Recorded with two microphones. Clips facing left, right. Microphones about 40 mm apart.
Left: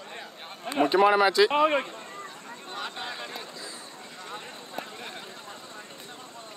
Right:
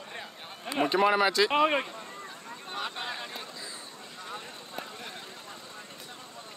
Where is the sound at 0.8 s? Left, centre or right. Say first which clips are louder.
Left 4 dB; centre.